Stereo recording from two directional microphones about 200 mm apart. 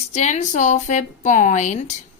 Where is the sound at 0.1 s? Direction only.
35° left (ahead or behind).